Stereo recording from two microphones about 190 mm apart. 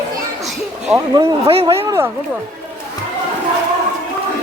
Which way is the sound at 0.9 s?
20° right (ahead or behind).